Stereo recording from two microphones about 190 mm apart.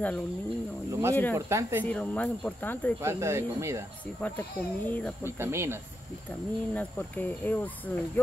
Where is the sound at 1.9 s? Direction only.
5° left (ahead or behind).